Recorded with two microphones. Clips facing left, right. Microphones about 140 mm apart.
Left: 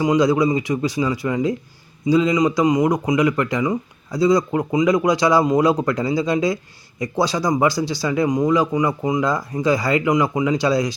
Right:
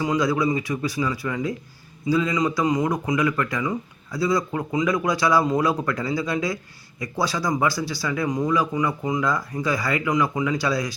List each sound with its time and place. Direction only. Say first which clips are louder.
0.0 s speech: left 5 dB; 20° left (ahead or behind)